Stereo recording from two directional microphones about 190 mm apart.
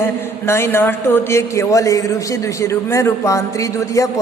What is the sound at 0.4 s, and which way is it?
A man's voice, 15° left (ahead or behind).